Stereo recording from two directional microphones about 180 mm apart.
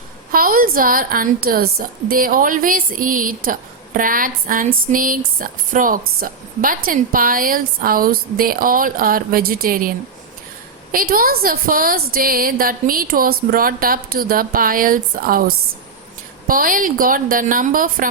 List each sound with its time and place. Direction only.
0.3 s a woman's voice: 55° right (ahead or behind)
10.9 s a woman's voice: 55° right (ahead or behind)
16.5 s a woman's voice: 50° right (ahead or behind)